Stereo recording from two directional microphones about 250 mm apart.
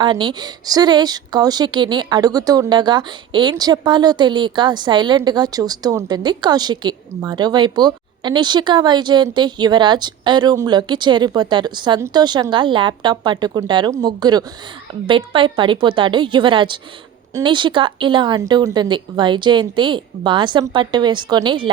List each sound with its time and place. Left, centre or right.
0.0 s a woman's voice: centre